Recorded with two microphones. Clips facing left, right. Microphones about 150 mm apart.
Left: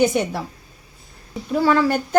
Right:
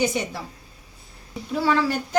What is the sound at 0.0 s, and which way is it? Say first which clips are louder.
Speech: left 6 dB; 55° left (ahead or behind).